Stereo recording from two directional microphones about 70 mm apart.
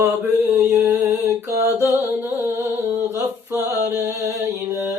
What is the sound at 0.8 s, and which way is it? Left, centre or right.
Mantra, right.